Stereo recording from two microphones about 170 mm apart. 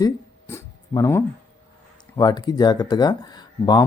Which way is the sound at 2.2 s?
25° left (ahead or behind).